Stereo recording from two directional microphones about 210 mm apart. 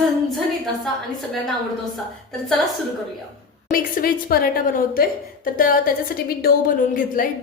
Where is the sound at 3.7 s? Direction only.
45° left (ahead or behind).